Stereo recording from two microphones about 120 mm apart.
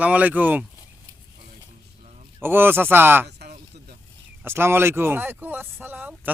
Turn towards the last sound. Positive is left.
turn(degrees=-15)  # may be behind; listen again after turning